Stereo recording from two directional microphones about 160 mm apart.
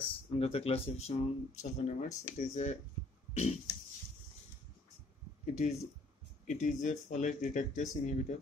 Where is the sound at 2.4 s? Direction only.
45° left (ahead or behind).